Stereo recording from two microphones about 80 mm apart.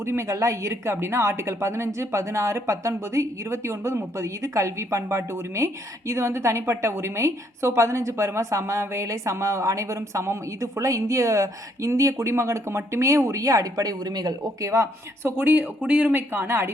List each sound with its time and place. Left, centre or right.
0.0 s a woman's voice: right
15.4 s speech: centre